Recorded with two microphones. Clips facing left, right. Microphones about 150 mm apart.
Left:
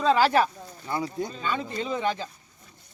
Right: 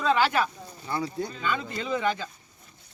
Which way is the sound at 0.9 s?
20° left (ahead or behind).